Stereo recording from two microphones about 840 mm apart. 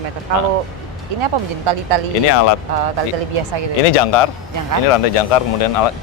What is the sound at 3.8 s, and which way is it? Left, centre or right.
Speech, left.